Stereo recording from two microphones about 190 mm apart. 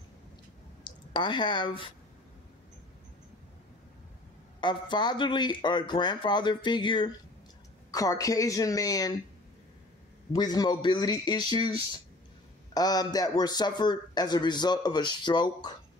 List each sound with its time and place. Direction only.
0.8 s speech: 25° left (ahead or behind)
4.6 s a man's voice: 25° left (ahead or behind)
10.3 s a man's voice: 20° left (ahead or behind)
12.7 s a man's voice: 20° left (ahead or behind)